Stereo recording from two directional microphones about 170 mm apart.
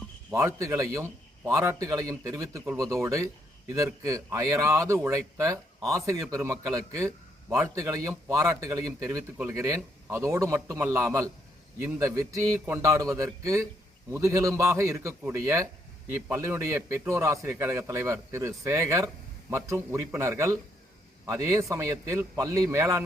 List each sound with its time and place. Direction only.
0.3 s a man's voice: 15° right (ahead or behind)